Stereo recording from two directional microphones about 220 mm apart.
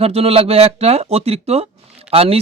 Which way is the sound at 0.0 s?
25° right (ahead or behind).